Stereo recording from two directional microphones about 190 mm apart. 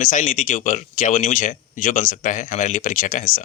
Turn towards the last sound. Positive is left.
turn(degrees=45)  # may be behind; listen again after turning